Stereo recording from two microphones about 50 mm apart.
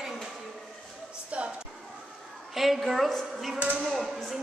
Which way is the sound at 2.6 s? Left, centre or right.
Centre.